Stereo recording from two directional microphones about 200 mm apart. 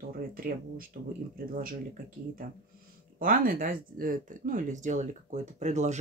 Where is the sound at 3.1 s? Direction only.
45° right (ahead or behind).